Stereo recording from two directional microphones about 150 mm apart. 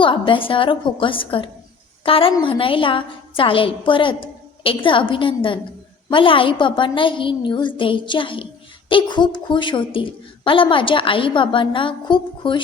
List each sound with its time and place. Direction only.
0.0 s a woman's voice: 35° left (ahead or behind)